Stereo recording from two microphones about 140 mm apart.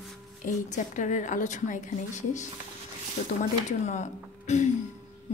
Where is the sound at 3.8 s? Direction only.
55° left (ahead or behind).